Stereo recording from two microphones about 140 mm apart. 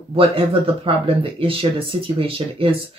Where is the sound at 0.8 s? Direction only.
40° right (ahead or behind).